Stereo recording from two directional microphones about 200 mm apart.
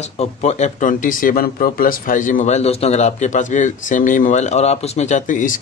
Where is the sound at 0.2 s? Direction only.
35° left (ahead or behind).